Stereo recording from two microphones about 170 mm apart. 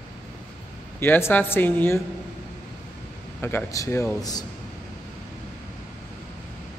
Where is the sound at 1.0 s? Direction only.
15° left (ahead or behind).